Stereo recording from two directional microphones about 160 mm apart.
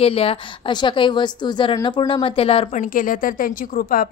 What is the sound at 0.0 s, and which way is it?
A woman's voice, 35° left (ahead or behind).